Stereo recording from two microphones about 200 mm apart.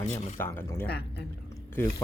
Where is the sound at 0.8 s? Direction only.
55° left (ahead or behind).